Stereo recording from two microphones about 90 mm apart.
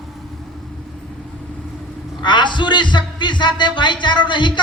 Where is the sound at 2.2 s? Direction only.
60° left (ahead or behind).